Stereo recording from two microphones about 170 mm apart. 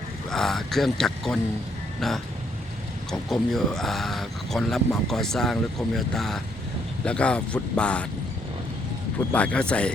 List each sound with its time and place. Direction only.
0.3 s speech: centre (ahead or behind)
9.3 s speech: 5° left (ahead or behind)